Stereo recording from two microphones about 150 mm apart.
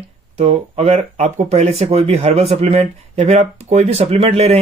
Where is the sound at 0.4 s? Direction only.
40° right (ahead or behind).